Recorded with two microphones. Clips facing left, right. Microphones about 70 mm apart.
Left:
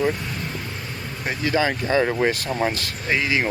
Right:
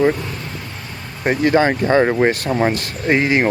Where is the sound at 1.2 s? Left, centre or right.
Right.